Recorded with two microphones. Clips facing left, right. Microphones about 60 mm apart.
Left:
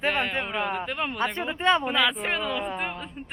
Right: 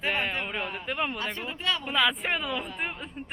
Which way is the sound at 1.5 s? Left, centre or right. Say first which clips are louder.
Left 9 dB; left.